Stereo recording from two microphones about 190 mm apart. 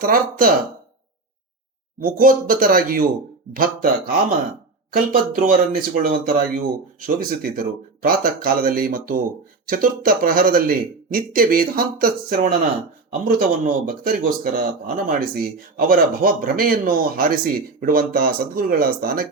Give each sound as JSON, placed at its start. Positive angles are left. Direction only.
{"t": 0.0, "sound": "speech", "side_deg": -50}
{"t": 2.0, "sound": "speech", "side_deg": -45}